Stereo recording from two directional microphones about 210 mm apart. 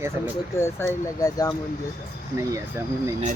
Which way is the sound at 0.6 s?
15° left (ahead or behind).